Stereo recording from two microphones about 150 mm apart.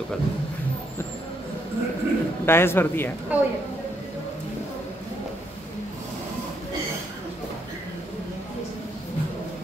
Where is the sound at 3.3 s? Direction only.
10° right (ahead or behind).